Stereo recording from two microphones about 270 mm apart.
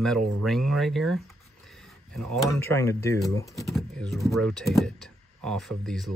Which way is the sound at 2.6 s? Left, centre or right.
Centre.